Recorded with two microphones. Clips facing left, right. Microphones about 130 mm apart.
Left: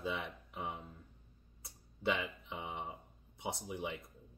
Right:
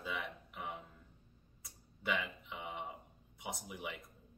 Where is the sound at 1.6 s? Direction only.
30° left (ahead or behind).